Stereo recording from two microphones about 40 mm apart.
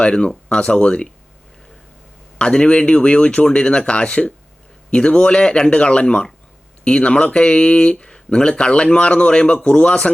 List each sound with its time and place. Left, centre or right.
0.0 s speech: left
2.4 s speech: left